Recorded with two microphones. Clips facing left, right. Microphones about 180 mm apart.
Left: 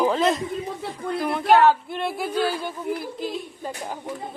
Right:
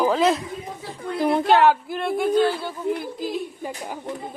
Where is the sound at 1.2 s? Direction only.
30° right (ahead or behind).